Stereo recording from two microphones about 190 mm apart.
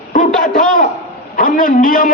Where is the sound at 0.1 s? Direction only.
45° left (ahead or behind).